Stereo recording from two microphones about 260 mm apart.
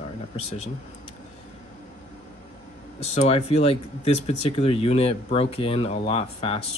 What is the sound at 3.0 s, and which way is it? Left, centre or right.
Speech, left.